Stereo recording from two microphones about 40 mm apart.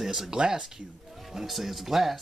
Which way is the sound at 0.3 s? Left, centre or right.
Centre.